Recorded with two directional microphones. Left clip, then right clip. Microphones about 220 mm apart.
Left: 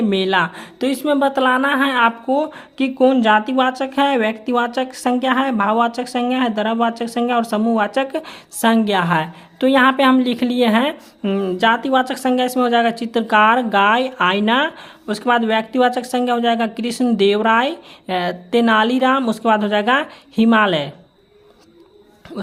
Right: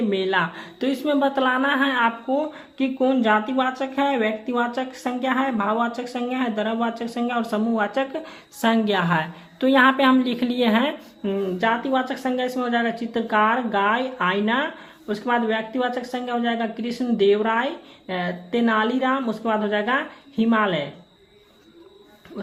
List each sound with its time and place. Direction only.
0.1 s speech: 35° left (ahead or behind)
11.3 s speech: 40° left (ahead or behind)